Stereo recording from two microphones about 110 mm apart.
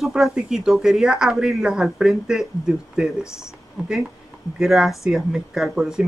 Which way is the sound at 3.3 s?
25° left (ahead or behind).